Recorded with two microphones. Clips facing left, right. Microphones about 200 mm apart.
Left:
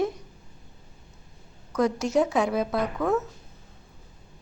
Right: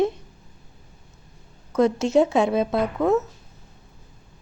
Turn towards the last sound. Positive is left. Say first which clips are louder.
# right 4 dB
turn(degrees=-25)  # may be behind; listen again after turning